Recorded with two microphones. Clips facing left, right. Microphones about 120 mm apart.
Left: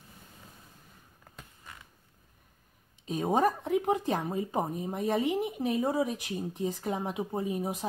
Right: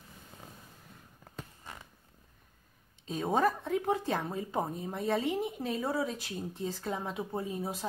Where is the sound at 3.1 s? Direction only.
15° left (ahead or behind).